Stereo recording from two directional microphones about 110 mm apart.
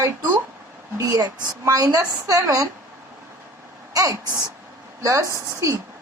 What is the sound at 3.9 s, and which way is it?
A woman's voice, 30° right (ahead or behind).